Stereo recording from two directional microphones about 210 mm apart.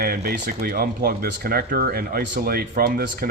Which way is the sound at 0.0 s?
50° right (ahead or behind).